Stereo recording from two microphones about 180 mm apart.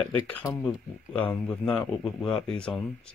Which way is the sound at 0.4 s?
20° left (ahead or behind).